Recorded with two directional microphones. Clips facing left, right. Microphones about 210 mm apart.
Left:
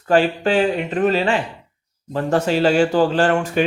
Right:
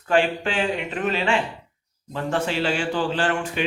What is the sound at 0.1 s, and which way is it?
A man's voice, 40° left (ahead or behind).